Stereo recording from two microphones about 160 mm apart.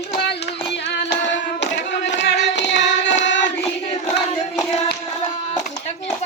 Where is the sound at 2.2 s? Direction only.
90° left.